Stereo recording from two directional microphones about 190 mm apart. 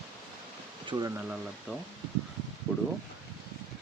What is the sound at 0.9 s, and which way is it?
Speech, 20° right (ahead or behind).